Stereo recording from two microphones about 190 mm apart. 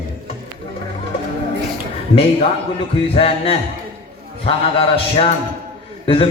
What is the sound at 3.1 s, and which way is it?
Music, 30° left (ahead or behind).